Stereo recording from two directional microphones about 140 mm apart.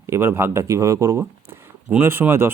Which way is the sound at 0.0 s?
20° right (ahead or behind).